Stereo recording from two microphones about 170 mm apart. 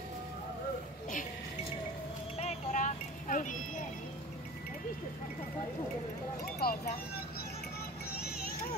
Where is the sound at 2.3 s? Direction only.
40° left (ahead or behind).